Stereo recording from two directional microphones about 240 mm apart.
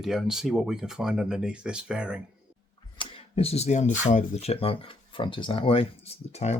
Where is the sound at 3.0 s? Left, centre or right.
Left.